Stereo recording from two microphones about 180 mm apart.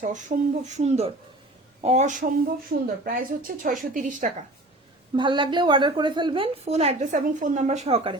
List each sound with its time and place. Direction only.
0.0 s a woman's voice: 45° right (ahead or behind)
5.1 s a woman's voice: 25° right (ahead or behind)